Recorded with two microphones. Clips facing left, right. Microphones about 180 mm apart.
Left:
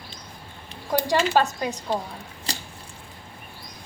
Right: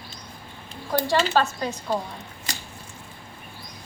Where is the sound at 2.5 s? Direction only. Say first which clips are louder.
Left 3 dB; 30° left (ahead or behind).